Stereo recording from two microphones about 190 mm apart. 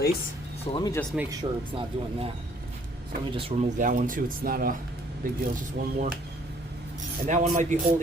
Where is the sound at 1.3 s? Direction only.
25° right (ahead or behind).